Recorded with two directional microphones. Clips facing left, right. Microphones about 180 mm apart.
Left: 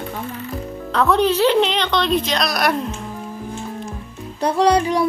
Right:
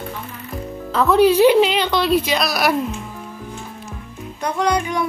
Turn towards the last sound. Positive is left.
turn(degrees=35)  # may be behind; listen again after turning